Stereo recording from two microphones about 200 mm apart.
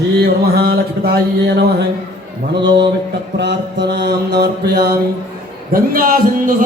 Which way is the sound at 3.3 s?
60° right (ahead or behind).